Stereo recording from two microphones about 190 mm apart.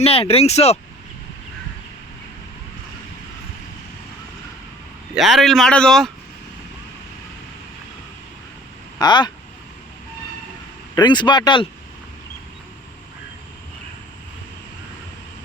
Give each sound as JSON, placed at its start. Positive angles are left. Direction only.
{"t": 0.0, "sound": "speech", "side_deg": 30}
{"t": 5.1, "sound": "speech", "side_deg": 0}
{"t": 9.0, "sound": "speech", "side_deg": 20}
{"t": 10.9, "sound": "speech", "side_deg": 25}